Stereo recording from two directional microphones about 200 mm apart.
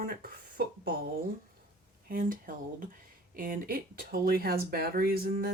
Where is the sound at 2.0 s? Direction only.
45° right (ahead or behind).